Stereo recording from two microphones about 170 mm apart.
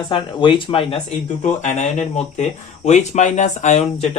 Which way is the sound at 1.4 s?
45° left (ahead or behind).